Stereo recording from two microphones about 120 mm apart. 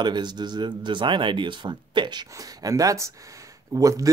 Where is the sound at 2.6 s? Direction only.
30° right (ahead or behind).